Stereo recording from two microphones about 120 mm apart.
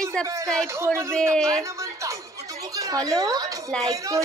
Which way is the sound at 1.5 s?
25° right (ahead or behind).